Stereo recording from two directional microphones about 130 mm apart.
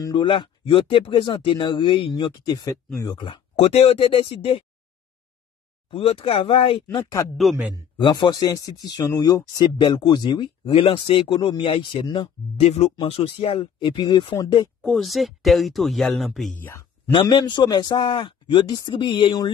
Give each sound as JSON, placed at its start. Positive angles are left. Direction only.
{"t": 0.0, "sound": "speech", "side_deg": 40}
{"t": 3.3, "sound": "speech", "side_deg": 45}
{"t": 5.9, "sound": "speech", "side_deg": 45}
{"t": 6.9, "sound": "speech", "side_deg": 30}
{"t": 12.5, "sound": "speech", "side_deg": 55}
{"t": 14.8, "sound": "speech", "side_deg": 0}
{"t": 17.1, "sound": "speech", "side_deg": 35}